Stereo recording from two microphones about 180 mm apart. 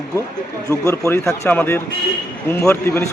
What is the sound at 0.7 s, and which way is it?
Speech, 15° left (ahead or behind).